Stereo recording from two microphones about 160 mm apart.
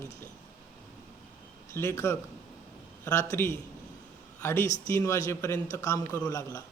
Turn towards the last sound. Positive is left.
turn(degrees=20)  # may be behind; listen again after turning